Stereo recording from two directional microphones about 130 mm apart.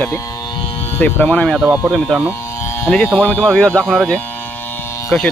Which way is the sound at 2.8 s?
10° left (ahead or behind).